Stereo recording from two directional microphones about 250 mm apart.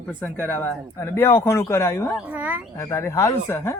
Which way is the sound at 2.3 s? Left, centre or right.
Centre.